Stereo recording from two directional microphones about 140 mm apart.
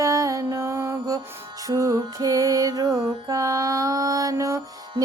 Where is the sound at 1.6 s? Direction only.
25° right (ahead or behind).